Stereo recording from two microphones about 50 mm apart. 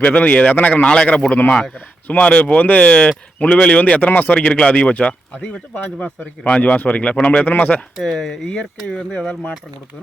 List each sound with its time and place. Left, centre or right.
0.0 s speech: left
4.4 s speech: left
7.4 s speech: left
8.9 s speech: centre